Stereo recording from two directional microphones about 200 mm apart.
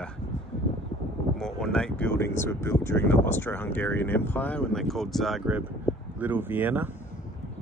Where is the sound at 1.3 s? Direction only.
5° left (ahead or behind).